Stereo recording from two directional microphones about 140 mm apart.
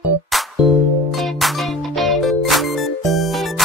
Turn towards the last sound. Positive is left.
turn(degrees=0)  # may be behind; listen again after turning